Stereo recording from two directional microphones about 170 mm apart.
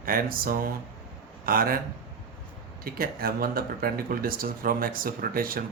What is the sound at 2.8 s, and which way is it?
Speech, 60° right (ahead or behind).